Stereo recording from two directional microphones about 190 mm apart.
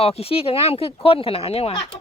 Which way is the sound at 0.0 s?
30° left (ahead or behind).